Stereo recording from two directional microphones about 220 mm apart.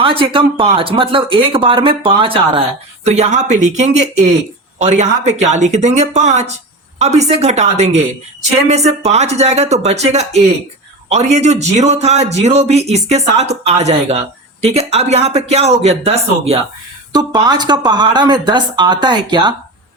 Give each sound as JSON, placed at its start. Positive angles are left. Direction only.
{"t": 0.0, "sound": "speech", "side_deg": -25}